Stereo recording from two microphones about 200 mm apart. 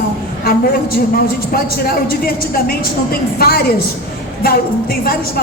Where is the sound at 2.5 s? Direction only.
45° left (ahead or behind).